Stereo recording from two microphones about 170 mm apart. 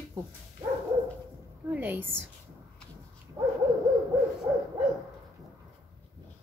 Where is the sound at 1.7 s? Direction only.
10° right (ahead or behind).